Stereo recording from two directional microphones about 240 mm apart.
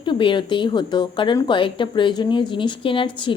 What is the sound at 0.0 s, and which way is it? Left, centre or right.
A woman's voice, centre.